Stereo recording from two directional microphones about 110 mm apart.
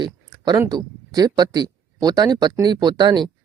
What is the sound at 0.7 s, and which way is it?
Speech, 40° right (ahead or behind).